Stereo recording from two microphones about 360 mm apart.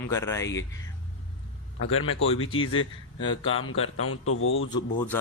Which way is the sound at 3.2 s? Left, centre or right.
Centre.